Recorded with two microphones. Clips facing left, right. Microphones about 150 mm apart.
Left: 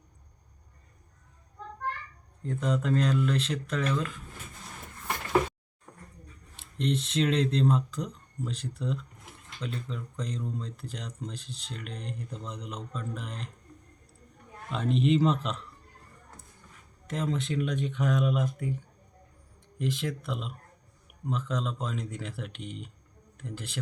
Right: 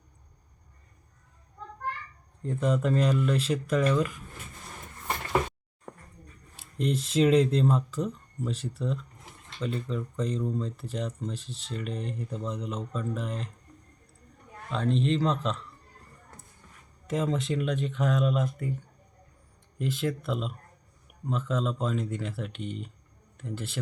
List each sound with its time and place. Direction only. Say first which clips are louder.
2.5 s speech: right 2 dB; 5° right (ahead or behind)
6.6 s speech: right 1 dB; 5° right (ahead or behind)
14.7 s speech: left 1 dB; 5° left (ahead or behind)
17.1 s speech: right 3 dB; 5° right (ahead or behind)
19.8 s speech: right 2 dB; centre (ahead or behind)